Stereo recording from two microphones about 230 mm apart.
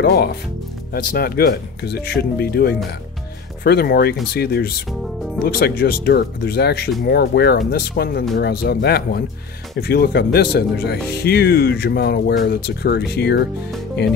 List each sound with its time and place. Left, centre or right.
0.0 s speech: left